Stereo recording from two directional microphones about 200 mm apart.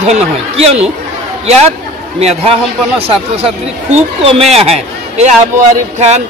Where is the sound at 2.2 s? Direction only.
30° right (ahead or behind).